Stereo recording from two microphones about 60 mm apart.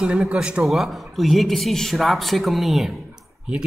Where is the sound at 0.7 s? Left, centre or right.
Centre.